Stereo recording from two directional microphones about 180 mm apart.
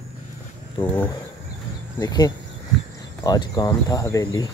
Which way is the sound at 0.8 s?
10° left (ahead or behind).